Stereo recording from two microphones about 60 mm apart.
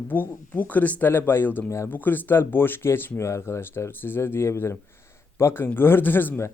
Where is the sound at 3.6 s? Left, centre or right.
Left.